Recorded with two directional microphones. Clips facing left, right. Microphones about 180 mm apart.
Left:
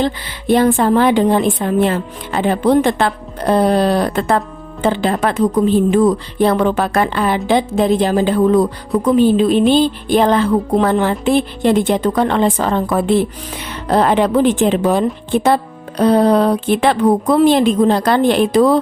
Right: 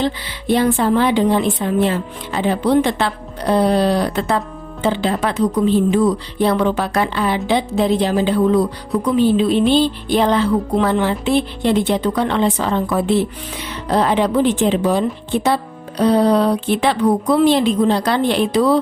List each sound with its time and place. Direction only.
0.0 s a woman's voice: 50° left (ahead or behind)